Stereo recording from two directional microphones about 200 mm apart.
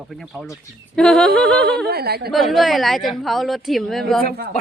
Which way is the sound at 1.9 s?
50° right (ahead or behind).